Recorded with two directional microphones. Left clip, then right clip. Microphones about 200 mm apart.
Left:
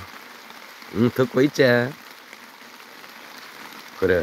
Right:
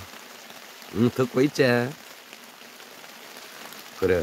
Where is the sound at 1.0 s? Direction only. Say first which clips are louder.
Left 3 dB; centre (ahead or behind).